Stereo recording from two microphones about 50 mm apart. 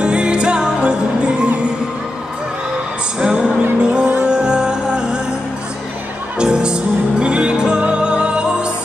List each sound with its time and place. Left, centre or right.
0.0 s music: centre
3.2 s music: centre
6.3 s music: centre